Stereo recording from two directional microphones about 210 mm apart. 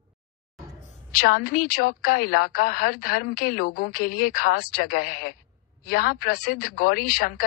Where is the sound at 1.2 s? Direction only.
45° left (ahead or behind).